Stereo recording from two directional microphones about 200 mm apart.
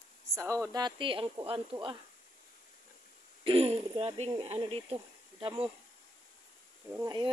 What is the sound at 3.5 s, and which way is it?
Speech, 30° right (ahead or behind).